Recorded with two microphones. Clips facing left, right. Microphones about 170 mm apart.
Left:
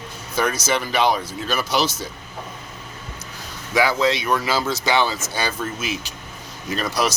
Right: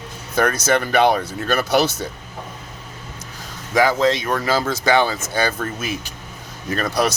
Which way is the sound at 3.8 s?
45° right (ahead or behind).